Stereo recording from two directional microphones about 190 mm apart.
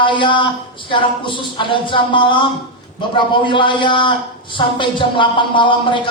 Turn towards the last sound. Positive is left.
turn(degrees=25)  # may be behind; listen again after turning